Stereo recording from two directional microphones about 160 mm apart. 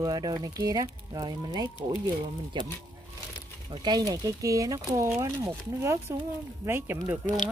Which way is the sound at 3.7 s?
25° right (ahead or behind).